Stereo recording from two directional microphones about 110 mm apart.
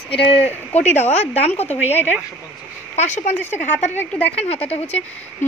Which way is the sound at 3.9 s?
20° left (ahead or behind).